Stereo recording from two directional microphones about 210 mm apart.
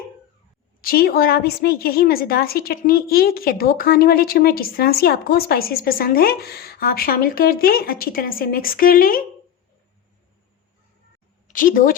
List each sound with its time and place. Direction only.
0.8 s a woman's voice: 45° left (ahead or behind)
11.4 s a woman's voice: 40° left (ahead or behind)